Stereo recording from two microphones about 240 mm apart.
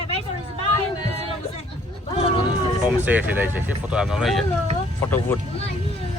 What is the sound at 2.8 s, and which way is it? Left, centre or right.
Speech, centre.